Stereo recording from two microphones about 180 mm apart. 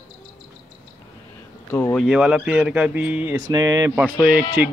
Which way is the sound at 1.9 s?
5° right (ahead or behind).